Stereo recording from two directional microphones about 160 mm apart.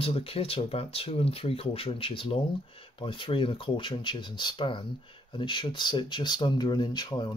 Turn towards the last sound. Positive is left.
turn(degrees=25)  # may be behind; listen again after turning